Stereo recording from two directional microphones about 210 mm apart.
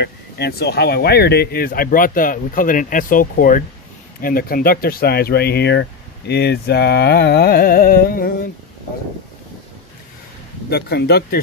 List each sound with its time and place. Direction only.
0.0 s speech: 50° left (ahead or behind)
10.7 s speech: 50° left (ahead or behind)